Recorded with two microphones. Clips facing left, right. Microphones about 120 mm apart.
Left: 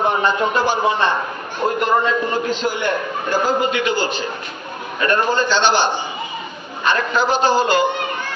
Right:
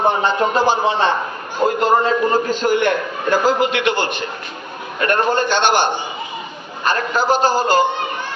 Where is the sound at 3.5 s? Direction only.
75° right (ahead or behind); by 5.9 s 55° right (ahead or behind).